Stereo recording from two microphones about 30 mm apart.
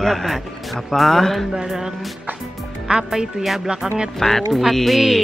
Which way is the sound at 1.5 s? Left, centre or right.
Centre.